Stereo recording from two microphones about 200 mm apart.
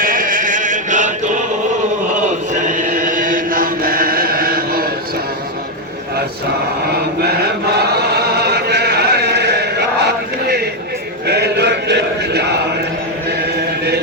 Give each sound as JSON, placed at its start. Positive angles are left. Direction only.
{"t": 0.0, "sound": "chant", "side_deg": -45}
{"t": 2.6, "sound": "chant", "side_deg": -40}
{"t": 7.8, "sound": "chant", "side_deg": -55}
{"t": 11.3, "sound": "chant", "side_deg": -55}